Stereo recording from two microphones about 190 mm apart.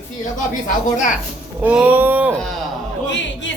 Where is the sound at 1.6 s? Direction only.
10° right (ahead or behind).